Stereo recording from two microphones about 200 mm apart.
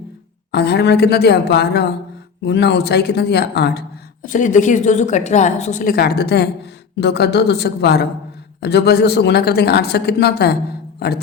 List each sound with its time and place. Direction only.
0.5 s speech: 55° left (ahead or behind)
4.3 s a woman's voice: 40° left (ahead or behind)